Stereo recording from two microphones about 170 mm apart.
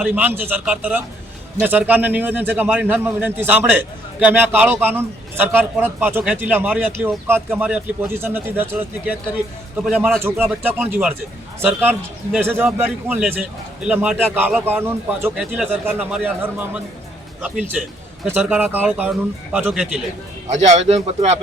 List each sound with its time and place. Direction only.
0.0 s a man's voice: 10° right (ahead or behind)
18.3 s a man's voice: 10° right (ahead or behind)
20.5 s speech: 40° right (ahead or behind)